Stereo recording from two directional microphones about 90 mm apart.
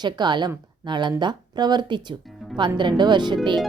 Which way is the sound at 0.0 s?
55° right (ahead or behind).